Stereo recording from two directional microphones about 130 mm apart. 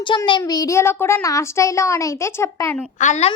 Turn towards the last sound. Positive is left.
turn(degrees=60)  # may be behind; listen again after turning